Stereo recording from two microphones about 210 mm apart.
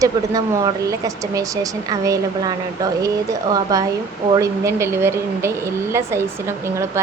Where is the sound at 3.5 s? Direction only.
15° right (ahead or behind).